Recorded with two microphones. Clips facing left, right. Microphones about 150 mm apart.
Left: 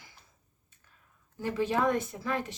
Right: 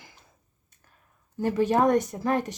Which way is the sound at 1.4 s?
45° right (ahead or behind).